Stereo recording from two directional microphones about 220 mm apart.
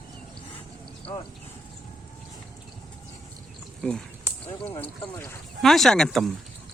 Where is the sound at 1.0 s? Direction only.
25° left (ahead or behind).